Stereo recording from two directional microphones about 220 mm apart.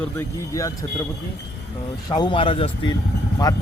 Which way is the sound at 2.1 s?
20° left (ahead or behind).